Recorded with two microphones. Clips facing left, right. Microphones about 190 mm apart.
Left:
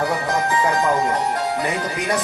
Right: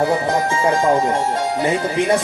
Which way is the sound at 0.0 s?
25° right (ahead or behind).